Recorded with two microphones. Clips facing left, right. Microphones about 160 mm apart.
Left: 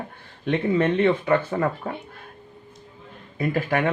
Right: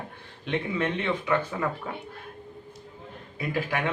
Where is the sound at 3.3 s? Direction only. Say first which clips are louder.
Left 6 dB; 45° left (ahead or behind).